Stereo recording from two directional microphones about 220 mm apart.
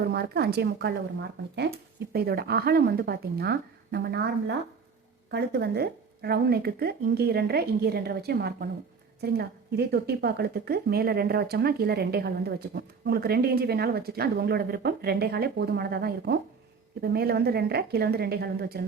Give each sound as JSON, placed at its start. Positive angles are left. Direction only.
{"t": 0.0, "sound": "speech", "side_deg": -45}
{"t": 2.1, "sound": "speech", "side_deg": -45}